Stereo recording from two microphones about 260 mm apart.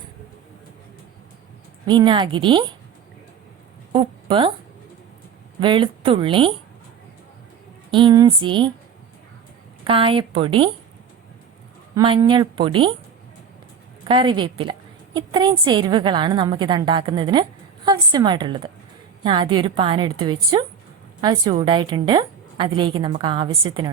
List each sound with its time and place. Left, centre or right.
1.9 s a woman's voice: centre
3.9 s a woman's voice: centre
5.5 s a woman's voice: centre
7.9 s a woman's voice: centre
9.8 s a woman's voice: centre
11.9 s a woman's voice: centre
14.1 s a woman's voice: centre